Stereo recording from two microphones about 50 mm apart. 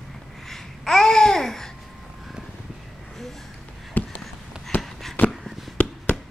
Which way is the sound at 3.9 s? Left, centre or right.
Left.